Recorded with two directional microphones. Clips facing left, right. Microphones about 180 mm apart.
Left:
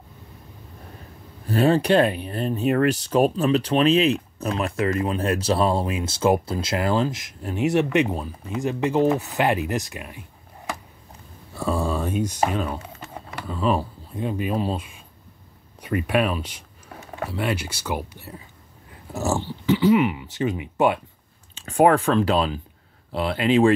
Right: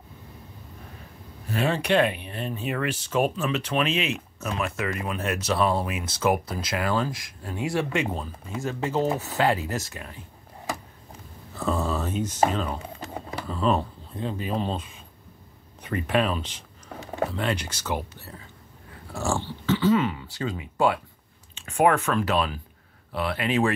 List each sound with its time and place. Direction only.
1.5 s speech: 35° left (ahead or behind); by 10.2 s 15° left (ahead or behind)
11.5 s speech: 10° left (ahead or behind)
21.5 s speech: 35° left (ahead or behind)